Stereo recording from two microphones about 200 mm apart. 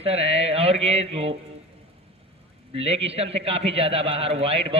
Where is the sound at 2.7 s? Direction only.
30° right (ahead or behind).